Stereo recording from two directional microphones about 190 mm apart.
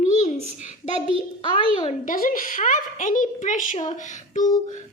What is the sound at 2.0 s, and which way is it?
A woman's voice, 45° left (ahead or behind).